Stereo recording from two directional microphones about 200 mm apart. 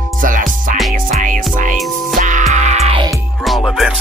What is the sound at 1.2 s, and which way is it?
Music, 40° right (ahead or behind).